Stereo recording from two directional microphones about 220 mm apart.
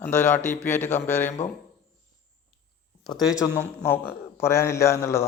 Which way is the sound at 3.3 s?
15° left (ahead or behind).